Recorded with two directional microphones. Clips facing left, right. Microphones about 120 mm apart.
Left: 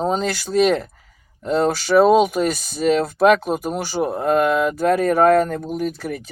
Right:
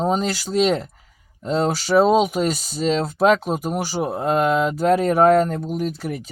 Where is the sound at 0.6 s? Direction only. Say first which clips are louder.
Left 2 dB; 20° right (ahead or behind).